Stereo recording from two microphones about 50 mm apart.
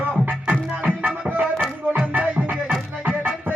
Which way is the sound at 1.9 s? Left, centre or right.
Right.